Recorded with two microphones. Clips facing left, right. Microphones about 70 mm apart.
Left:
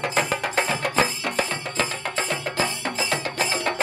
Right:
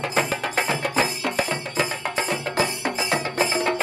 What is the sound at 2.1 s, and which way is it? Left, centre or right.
Music, right.